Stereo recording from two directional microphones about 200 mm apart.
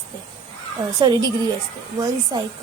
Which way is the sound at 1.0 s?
20° right (ahead or behind).